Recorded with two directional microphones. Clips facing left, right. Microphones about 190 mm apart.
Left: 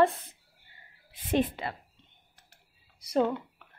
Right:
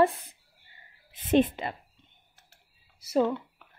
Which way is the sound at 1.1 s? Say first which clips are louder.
Right 5 dB; 25° right (ahead or behind).